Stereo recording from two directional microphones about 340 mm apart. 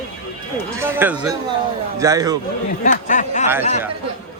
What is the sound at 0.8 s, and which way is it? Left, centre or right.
A man's voice, centre.